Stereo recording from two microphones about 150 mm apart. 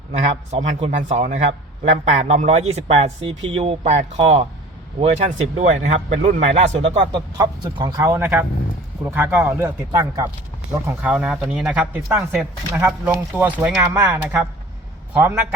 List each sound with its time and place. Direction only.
0.1 s a man's voice: 45° right (ahead or behind)
7.3 s speech: 30° right (ahead or behind)
10.8 s speech: 10° right (ahead or behind)